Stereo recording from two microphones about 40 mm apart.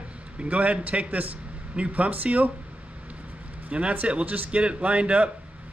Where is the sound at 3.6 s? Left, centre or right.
Right.